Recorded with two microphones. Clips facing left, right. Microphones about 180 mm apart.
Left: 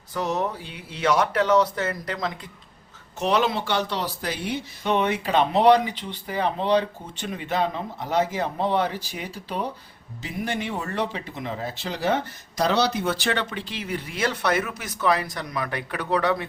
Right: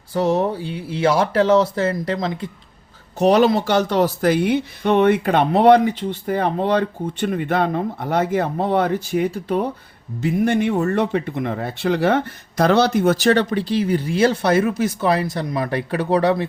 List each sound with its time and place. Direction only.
0.1 s speech: 30° right (ahead or behind)
3.2 s speech: 40° right (ahead or behind)